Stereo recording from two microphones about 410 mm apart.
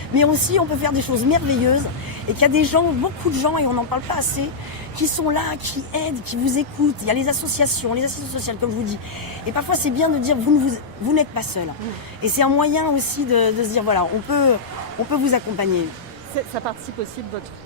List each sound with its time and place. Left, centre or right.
0.2 s a woman's voice: right